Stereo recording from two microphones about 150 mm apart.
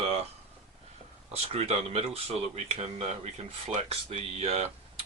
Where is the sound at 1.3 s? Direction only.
40° right (ahead or behind).